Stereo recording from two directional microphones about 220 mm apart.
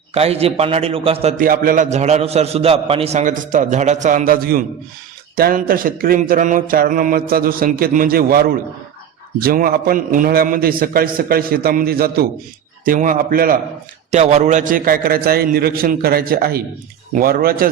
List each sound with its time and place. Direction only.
0.1 s a man's voice: 25° right (ahead or behind)